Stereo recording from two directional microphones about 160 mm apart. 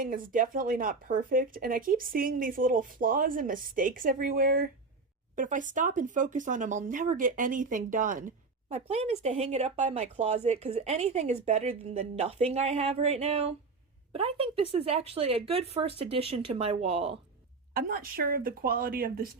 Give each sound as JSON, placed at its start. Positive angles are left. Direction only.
{"t": 0.0, "sound": "speech", "side_deg": -60}
{"t": 8.7, "sound": "speech", "side_deg": -40}
{"t": 17.7, "sound": "speech", "side_deg": -65}